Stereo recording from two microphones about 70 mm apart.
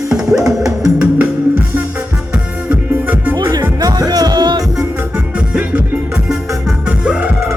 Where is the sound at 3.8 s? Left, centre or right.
Right.